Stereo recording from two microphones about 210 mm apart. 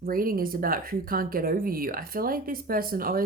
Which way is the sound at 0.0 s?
45° right (ahead or behind).